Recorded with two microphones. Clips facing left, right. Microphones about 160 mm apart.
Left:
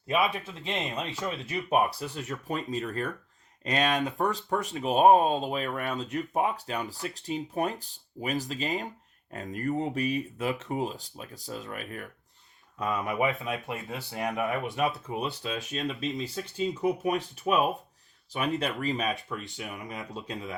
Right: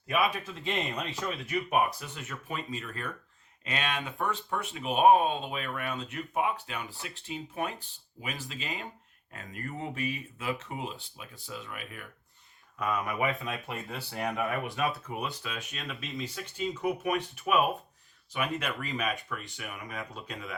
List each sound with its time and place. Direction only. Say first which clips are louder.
0.4 s speech: even; 25° left (ahead or behind); by 12.0 s 40° left (ahead or behind)
12.8 s speech: left 2 dB; 20° left (ahead or behind)